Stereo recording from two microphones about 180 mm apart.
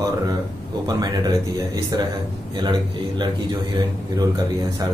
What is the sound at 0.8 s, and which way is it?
Speech, 20° right (ahead or behind).